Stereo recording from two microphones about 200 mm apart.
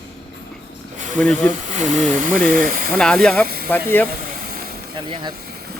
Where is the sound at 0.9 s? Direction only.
40° right (ahead or behind).